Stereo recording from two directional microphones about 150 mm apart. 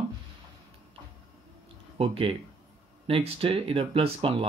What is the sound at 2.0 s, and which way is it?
Speech, 40° right (ahead or behind).